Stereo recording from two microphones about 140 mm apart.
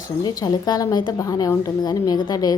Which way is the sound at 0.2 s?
25° left (ahead or behind).